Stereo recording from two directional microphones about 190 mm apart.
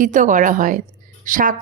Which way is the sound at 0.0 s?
40° right (ahead or behind).